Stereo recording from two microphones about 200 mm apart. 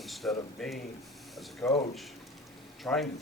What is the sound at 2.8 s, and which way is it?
Speech, centre (ahead or behind).